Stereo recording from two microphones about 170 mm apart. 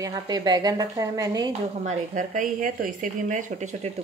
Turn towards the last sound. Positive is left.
turn(degrees=-45)  # may be behind; listen again after turning